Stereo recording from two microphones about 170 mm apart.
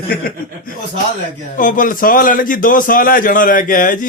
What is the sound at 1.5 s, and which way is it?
A man's voice, 50° left (ahead or behind).